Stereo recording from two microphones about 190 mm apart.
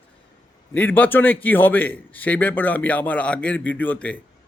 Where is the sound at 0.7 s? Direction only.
10° left (ahead or behind).